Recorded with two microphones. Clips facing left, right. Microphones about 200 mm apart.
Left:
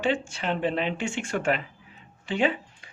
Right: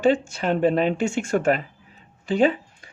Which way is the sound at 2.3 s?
40° right (ahead or behind).